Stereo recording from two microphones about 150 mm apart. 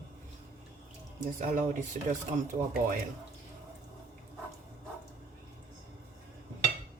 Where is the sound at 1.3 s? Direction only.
60° right (ahead or behind).